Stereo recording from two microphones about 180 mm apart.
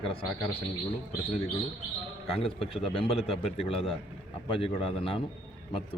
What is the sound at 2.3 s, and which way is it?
A man's voice, 30° left (ahead or behind).